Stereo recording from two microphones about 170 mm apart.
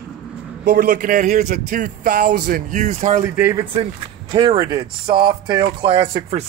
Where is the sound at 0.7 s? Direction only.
55° right (ahead or behind).